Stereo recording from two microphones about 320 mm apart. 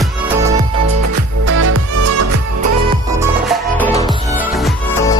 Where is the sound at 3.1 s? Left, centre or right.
Centre.